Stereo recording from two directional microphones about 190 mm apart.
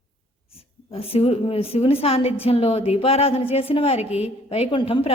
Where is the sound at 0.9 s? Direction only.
30° left (ahead or behind).